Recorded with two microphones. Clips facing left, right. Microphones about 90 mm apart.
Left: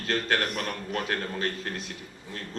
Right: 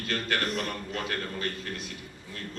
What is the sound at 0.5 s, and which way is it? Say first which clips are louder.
Speech: left 1 dB; 55° left (ahead or behind).